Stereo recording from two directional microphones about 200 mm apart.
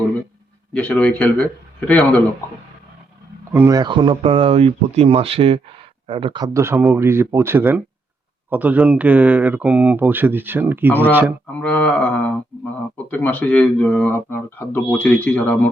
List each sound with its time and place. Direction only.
0.7 s speech: 5° left (ahead or behind)
3.5 s speech: 15° right (ahead or behind)
11.6 s speech: 5° left (ahead or behind)